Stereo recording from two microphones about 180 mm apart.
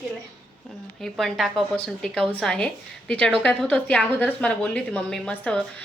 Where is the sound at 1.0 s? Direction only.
Centre (ahead or behind).